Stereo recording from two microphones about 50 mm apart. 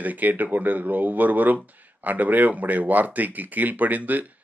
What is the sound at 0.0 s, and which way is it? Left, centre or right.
Speech, right.